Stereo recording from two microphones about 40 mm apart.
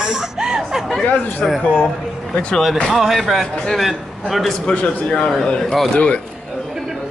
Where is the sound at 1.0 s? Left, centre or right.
Left.